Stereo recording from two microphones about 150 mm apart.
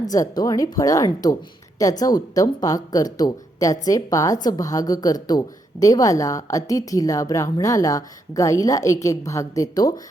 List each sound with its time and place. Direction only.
0.0 s a woman's voice: 25° left (ahead or behind)